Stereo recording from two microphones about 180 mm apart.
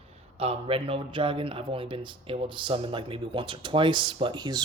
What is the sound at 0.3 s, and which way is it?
Speech, 30° right (ahead or behind).